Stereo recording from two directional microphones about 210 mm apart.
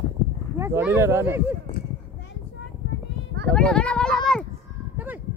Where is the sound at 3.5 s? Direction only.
5° left (ahead or behind).